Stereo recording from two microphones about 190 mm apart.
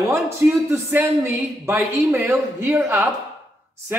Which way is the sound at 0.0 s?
15° right (ahead or behind).